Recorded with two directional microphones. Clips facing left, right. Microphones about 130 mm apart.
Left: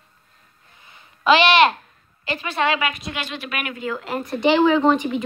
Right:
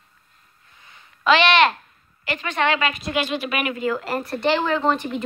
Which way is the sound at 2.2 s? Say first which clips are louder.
Even; 15° left (ahead or behind).